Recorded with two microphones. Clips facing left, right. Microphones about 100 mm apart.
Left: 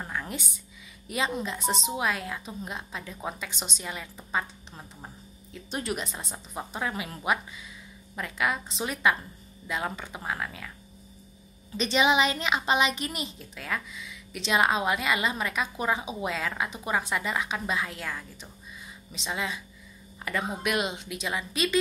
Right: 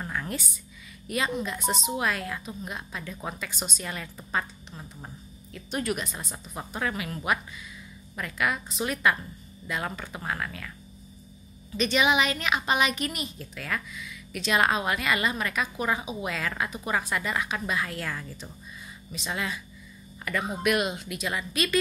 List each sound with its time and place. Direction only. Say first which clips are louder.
0.0 s a sound: right 2 dB; 15° left (ahead or behind)
1.0 s a woman's voice: right 1 dB; 20° left (ahead or behind)
3.8 s a woman's voice: right 1 dB; 10° left (ahead or behind)
5.5 s a woman's voice: right 2 dB; 25° left (ahead or behind)
6.1 s a woman's voice: left 1 dB; 15° left (ahead or behind)
11.7 s a woman's voice: even; 30° left (ahead or behind)